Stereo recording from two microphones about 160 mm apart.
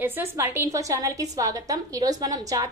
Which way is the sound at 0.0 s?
15° right (ahead or behind).